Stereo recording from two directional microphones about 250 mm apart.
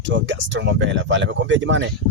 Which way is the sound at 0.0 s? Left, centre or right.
Right.